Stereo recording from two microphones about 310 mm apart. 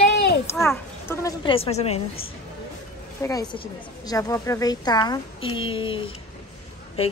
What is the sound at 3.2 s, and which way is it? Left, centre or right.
A woman's voice, centre.